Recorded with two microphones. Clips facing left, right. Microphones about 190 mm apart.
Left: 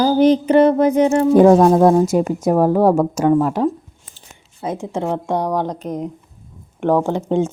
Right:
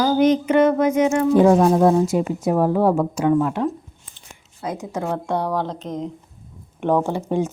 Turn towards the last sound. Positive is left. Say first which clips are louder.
# left 4 dB
turn(degrees=25)  # may be behind; listen again after turning